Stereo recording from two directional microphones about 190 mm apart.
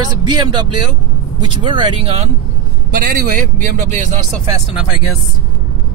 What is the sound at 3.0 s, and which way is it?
A man's voice, 45° right (ahead or behind).